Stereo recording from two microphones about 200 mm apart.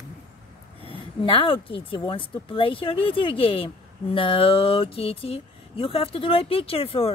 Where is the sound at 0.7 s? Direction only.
25° left (ahead or behind).